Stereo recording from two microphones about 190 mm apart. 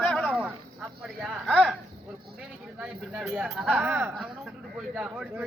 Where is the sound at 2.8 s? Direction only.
5° right (ahead or behind).